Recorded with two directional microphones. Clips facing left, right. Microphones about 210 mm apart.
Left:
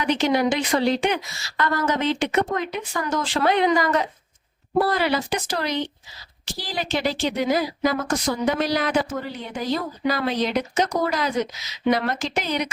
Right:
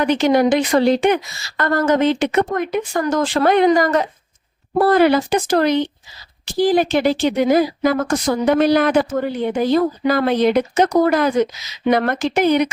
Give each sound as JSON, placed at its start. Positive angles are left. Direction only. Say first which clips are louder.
{"t": 0.0, "sound": "a woman's voice", "louder": "right 6 dB", "side_deg": -50}